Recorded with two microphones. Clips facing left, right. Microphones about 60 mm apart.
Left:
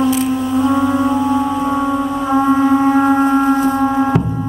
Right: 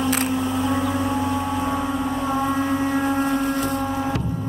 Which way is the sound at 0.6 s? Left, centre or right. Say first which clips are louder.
Left 8 dB; left.